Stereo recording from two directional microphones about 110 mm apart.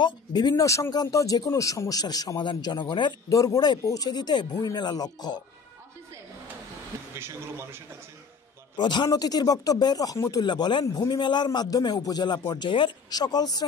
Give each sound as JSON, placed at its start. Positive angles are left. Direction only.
{"t": 0.0, "sound": "a man's voice", "side_deg": 40}
{"t": 3.3, "sound": "a man's voice", "side_deg": 30}
{"t": 7.2, "sound": "a man's voice", "side_deg": -20}
{"t": 8.7, "sound": "a man's voice", "side_deg": 40}
{"t": 10.4, "sound": "a man's voice", "side_deg": 45}